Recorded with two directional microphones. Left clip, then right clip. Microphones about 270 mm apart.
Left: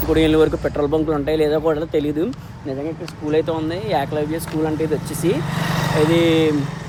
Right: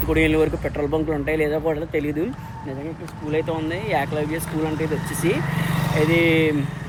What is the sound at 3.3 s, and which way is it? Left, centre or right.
Speech, centre.